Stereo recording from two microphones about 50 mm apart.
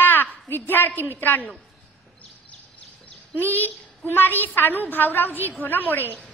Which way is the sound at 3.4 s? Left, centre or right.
Left.